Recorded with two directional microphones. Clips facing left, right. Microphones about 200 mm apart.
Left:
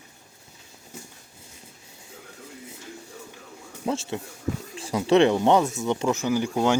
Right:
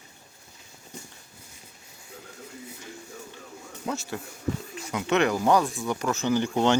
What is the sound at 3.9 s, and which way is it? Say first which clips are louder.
Speech: left 4 dB; 30° left (ahead or behind).